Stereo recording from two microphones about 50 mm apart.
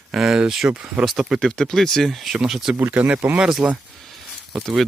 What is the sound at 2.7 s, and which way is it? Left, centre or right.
Speech, right.